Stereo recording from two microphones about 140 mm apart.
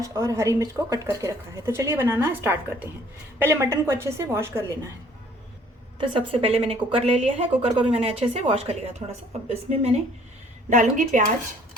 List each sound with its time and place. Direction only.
0.0 s a woman's voice: 25° right (ahead or behind)
6.0 s a woman's voice: 40° right (ahead or behind)
10.7 s a woman's voice: 65° right (ahead or behind)